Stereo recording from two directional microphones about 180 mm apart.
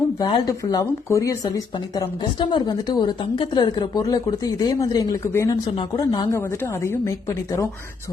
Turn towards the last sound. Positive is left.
turn(degrees=15)  # may be behind; listen again after turning